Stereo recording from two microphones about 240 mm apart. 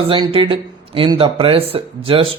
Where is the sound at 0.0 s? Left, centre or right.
Right.